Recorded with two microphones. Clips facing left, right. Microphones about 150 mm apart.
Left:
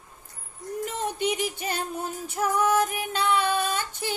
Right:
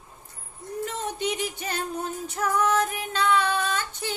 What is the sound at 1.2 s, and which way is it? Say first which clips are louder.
Female singing: left 2 dB; 10° left (ahead or behind).